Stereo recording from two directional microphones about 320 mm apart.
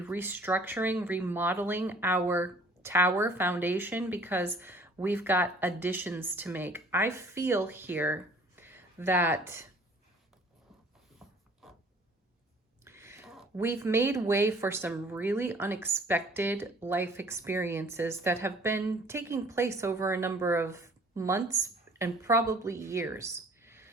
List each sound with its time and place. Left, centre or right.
0.0 s speech: centre
11.2 s a sound: centre
12.8 s speech: centre